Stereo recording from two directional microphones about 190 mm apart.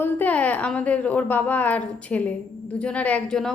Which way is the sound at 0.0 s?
10° left (ahead or behind).